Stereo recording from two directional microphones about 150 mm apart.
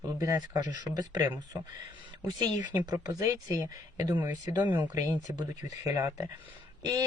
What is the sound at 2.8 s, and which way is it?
Speech, 25° right (ahead or behind).